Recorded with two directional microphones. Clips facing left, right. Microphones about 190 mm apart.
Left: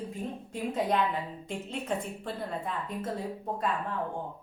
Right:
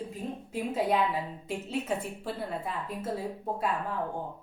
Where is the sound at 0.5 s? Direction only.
5° right (ahead or behind).